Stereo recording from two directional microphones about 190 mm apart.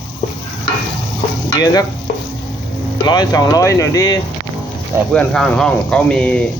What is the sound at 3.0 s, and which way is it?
Stir, 20° left (ahead or behind).